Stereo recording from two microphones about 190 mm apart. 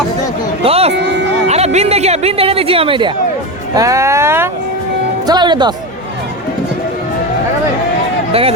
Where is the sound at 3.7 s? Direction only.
15° right (ahead or behind).